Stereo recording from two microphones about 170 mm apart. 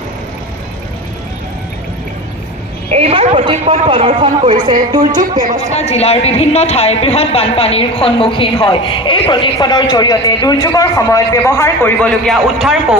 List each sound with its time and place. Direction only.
2.9 s a man's voice: 35° right (ahead or behind)
5.7 s speech: 40° left (ahead or behind); by 12.7 s centre (ahead or behind)